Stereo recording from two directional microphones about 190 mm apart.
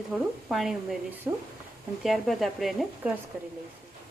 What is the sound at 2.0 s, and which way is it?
A woman's voice, centre (ahead or behind).